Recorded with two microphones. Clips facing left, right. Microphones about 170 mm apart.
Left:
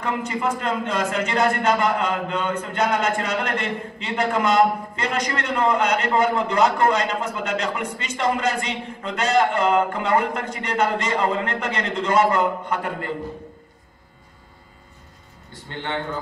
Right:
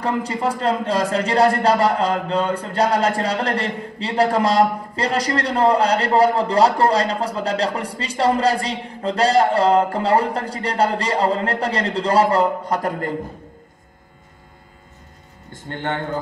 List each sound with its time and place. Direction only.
0.0 s a man's voice: 35° right (ahead or behind)
15.5 s a man's voice: 50° right (ahead or behind)